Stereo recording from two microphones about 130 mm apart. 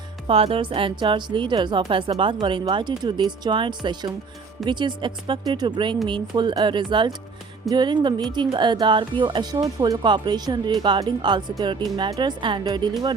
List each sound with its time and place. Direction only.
0.3 s a woman's voice: 45° right (ahead or behind)